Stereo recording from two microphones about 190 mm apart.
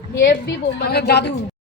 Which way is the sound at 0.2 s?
65° left (ahead or behind).